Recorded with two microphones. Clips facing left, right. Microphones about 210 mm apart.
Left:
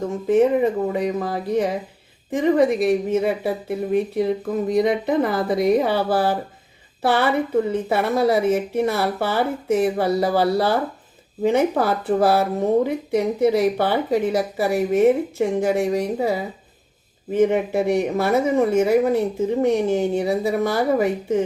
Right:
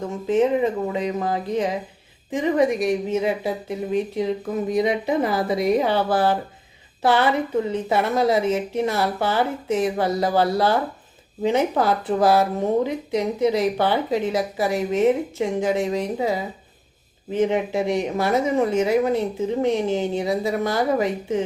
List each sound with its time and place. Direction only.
0.3 s speech: 55° left (ahead or behind)
7.0 s speech: 60° left (ahead or behind)